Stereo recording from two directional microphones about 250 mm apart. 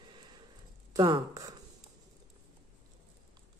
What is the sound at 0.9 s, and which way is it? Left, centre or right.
Speech, centre.